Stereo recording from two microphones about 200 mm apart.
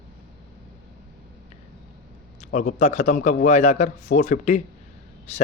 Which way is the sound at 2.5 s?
40° left (ahead or behind).